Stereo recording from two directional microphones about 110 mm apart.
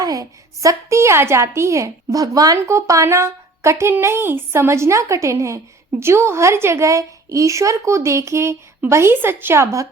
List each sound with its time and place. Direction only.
0.0 s a woman's voice: 30° right (ahead or behind)